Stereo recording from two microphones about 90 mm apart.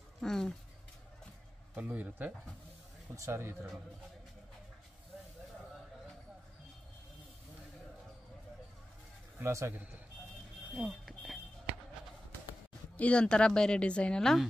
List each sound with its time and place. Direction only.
0.2 s speech: 5° left (ahead or behind)
1.8 s a man's voice: 15° right (ahead or behind)
9.4 s a man's voice: 35° right (ahead or behind)
10.9 s a sound: centre (ahead or behind)
12.9 s a woman's voice: 15° left (ahead or behind)